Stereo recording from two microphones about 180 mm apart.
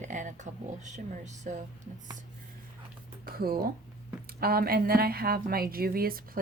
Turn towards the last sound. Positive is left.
turn(degrees=-55)  # may be behind; listen again after turning